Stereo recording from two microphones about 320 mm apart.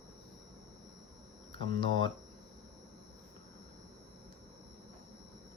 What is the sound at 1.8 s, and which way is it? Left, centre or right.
Speech, right.